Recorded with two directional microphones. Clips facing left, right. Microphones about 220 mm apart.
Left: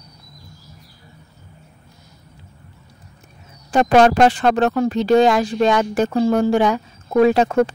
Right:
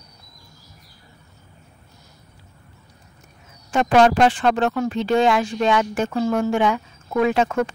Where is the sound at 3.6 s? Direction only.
40° left (ahead or behind).